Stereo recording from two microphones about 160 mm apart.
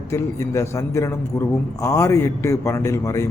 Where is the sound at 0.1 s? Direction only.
20° left (ahead or behind).